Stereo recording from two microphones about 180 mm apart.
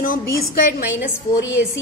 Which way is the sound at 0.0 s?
50° left (ahead or behind).